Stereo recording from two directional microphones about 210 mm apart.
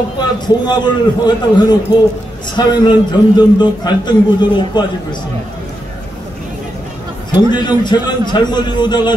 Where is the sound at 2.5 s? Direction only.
20° left (ahead or behind).